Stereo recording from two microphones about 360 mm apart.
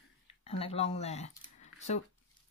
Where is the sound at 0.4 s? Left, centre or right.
Centre.